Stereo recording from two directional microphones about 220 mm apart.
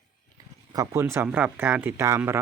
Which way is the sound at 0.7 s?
15° right (ahead or behind).